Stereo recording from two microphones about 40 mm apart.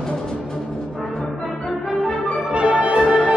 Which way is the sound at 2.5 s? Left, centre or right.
Right.